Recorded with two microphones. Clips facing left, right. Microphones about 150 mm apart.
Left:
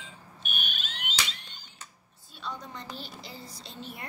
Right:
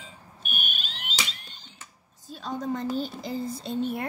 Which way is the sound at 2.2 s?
45° right (ahead or behind).